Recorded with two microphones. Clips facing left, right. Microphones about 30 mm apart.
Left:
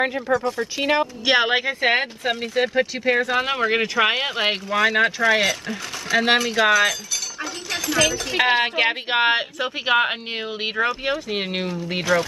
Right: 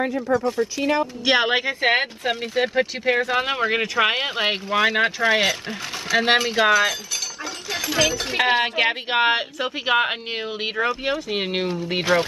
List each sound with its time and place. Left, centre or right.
0.4 s speech: centre
1.2 s speech: centre
8.4 s speech: centre
12.0 s speech: right